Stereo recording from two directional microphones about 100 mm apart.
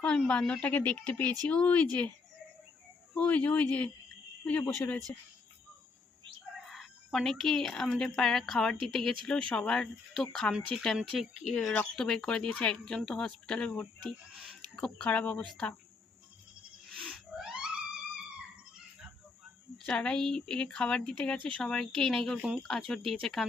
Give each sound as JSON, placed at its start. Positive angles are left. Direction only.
{"t": 0.0, "sound": "speech", "side_deg": 10}
{"t": 3.2, "sound": "speech", "side_deg": 15}
{"t": 6.7, "sound": "speech", "side_deg": 0}
{"t": 16.9, "sound": "music", "side_deg": 0}
{"t": 19.8, "sound": "speech", "side_deg": 10}